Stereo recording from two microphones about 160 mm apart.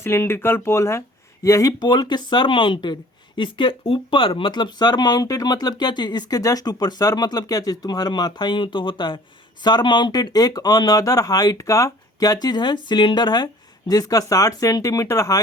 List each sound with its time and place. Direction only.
0.0 s speech: 15° left (ahead or behind)